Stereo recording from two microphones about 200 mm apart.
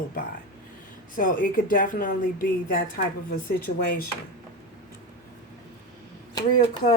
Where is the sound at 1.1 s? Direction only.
45° left (ahead or behind).